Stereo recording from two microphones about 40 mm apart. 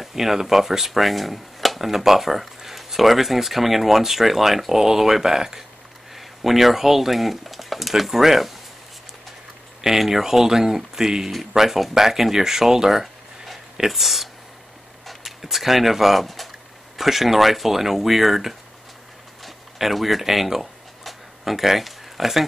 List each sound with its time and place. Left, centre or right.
0.0 s speech: centre
9.8 s speech: centre
19.4 s a sound: centre